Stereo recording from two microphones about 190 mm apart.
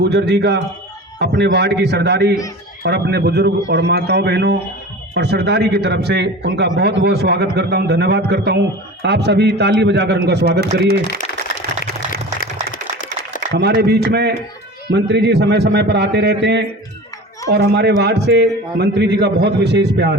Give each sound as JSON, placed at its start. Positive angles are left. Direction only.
{"t": 0.0, "sound": "a man's voice", "side_deg": -60}
{"t": 13.5, "sound": "a man's voice", "side_deg": -60}